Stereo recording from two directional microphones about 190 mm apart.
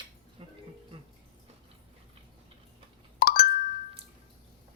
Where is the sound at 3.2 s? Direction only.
50° left (ahead or behind).